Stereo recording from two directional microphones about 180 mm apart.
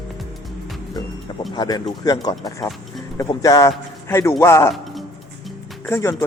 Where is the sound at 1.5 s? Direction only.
25° left (ahead or behind).